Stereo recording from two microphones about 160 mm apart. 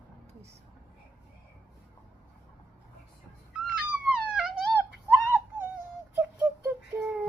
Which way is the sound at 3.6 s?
5° right (ahead or behind).